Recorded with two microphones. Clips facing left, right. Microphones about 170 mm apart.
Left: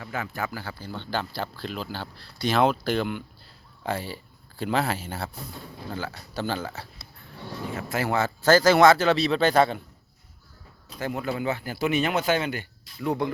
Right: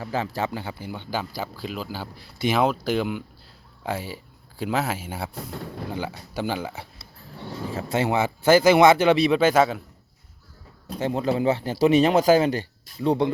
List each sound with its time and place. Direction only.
0.0 s a man's voice: 30° right (ahead or behind); by 6.8 s 15° right (ahead or behind)
7.7 s a man's voice: 30° right (ahead or behind); by 9.8 s 5° right (ahead or behind)
11.0 s a man's voice: 30° right (ahead or behind)